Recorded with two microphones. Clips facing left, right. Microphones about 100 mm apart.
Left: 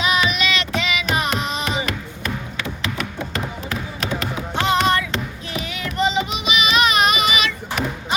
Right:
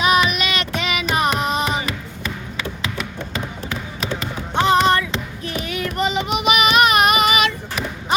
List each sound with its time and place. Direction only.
0.0 s child singing: 45° right (ahead or behind)
1.1 s a sound: 45° right (ahead or behind)
4.6 s music: 40° right (ahead or behind)
5.6 s child singing: 50° right (ahead or behind)